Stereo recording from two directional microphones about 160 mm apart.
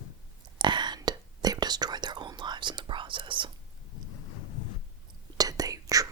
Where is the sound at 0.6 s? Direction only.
30° right (ahead or behind).